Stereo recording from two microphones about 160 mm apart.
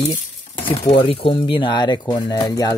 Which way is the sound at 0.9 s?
35° left (ahead or behind).